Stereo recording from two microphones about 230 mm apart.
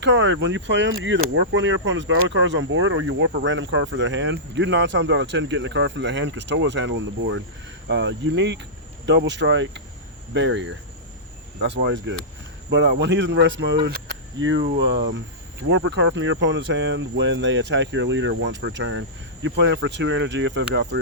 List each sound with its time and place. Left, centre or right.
0.0 s speech: right